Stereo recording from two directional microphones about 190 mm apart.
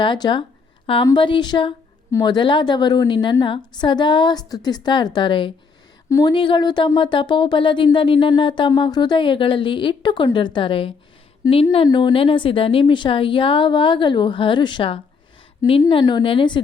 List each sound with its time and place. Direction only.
0.0 s a woman's voice: 25° left (ahead or behind)